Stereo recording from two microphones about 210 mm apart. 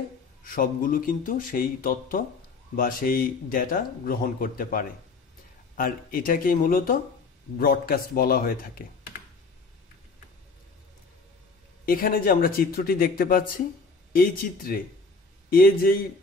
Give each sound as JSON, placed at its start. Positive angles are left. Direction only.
{"t": 0.4, "sound": "speech", "side_deg": 40}
{"t": 11.8, "sound": "speech", "side_deg": 40}